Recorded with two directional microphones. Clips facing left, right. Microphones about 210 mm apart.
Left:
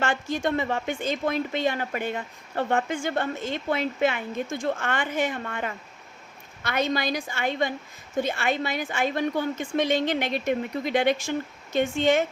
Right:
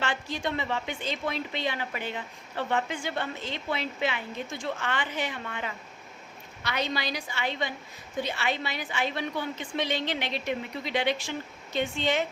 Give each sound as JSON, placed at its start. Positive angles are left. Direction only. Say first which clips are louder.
{"t": 0.0, "sound": "a woman's voice", "louder": "left 5 dB", "side_deg": 50}